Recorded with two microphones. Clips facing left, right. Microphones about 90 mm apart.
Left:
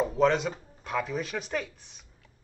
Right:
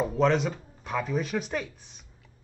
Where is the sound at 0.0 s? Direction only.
Centre (ahead or behind).